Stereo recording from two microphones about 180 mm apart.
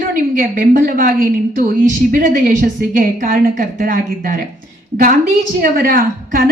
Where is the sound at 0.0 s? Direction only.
50° right (ahead or behind).